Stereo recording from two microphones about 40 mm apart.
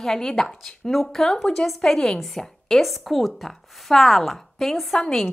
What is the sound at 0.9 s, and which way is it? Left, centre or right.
A woman's voice, centre.